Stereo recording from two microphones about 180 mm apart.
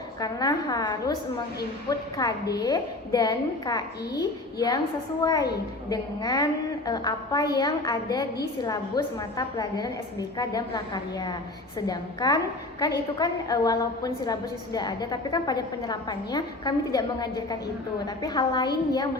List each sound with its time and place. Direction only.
0.2 s a woman's voice: 20° left (ahead or behind)